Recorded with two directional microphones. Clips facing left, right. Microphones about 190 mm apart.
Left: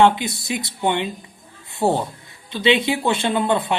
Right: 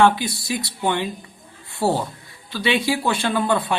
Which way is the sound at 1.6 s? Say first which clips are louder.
Left 1 dB; 20° left (ahead or behind).